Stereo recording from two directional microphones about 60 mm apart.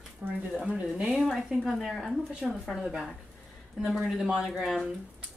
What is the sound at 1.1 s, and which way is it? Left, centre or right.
Speech, centre.